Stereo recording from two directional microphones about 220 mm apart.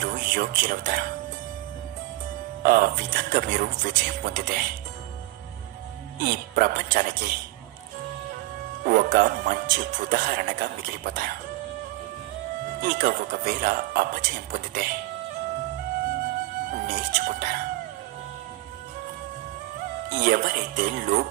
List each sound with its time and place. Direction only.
0.0 s speech: 40° right (ahead or behind)
2.6 s speech: 40° right (ahead or behind)
6.2 s speech: 40° right (ahead or behind)
8.8 s speech: 40° right (ahead or behind)
12.8 s speech: 40° right (ahead or behind)
16.8 s speech: 40° right (ahead or behind)
20.1 s speech: 40° right (ahead or behind)